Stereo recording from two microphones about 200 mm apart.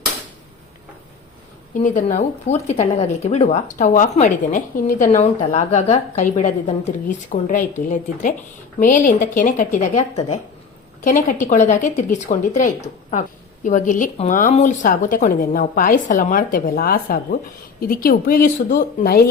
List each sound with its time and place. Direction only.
1.8 s a woman's voice: 40° left (ahead or behind)